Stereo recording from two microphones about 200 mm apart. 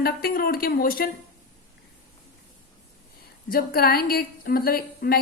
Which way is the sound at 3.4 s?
45° left (ahead or behind).